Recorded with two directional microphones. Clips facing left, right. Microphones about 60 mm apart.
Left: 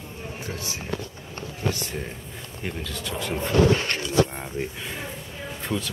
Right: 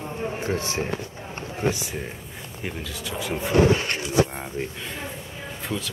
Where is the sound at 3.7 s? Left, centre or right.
Right.